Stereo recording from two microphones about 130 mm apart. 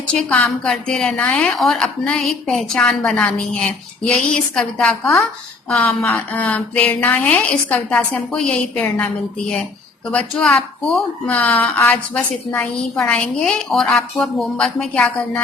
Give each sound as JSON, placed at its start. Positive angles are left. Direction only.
{"t": 0.1, "sound": "a woman's voice", "side_deg": 10}
{"t": 10.1, "sound": "a woman's voice", "side_deg": 5}